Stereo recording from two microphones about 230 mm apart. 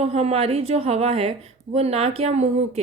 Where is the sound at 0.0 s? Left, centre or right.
Right.